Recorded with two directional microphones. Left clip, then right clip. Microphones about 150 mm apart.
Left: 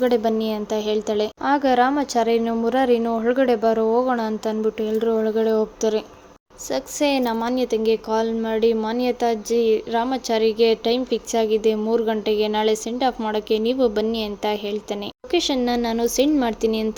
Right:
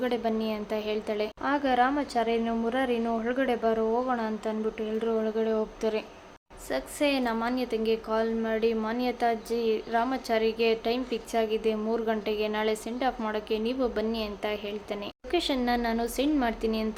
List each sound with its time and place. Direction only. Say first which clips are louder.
0.0 s a woman's voice: left 9 dB; 35° left (ahead or behind)